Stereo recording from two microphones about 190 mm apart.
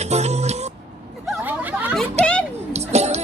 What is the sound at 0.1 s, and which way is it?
Music, 35° right (ahead or behind).